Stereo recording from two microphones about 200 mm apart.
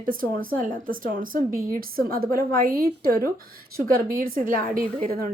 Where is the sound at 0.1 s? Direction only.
45° right (ahead or behind).